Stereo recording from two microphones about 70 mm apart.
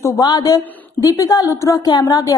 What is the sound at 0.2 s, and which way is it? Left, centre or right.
Speech, left.